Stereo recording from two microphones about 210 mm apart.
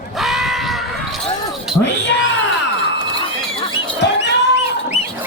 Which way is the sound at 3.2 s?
25° left (ahead or behind).